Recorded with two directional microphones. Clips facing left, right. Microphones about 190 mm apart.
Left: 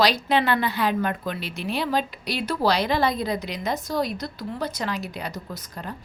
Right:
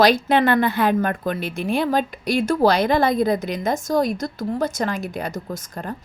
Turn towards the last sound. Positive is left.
turn(degrees=-50)  # may be behind; listen again after turning